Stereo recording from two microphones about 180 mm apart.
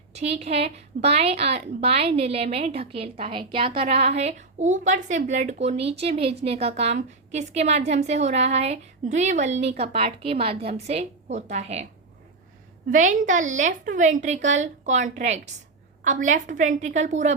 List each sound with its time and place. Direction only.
0.1 s a woman's voice: 35° right (ahead or behind)
12.9 s a woman's voice: 45° right (ahead or behind)